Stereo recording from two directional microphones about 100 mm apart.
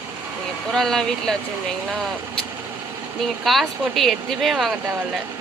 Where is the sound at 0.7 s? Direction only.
5° left (ahead or behind).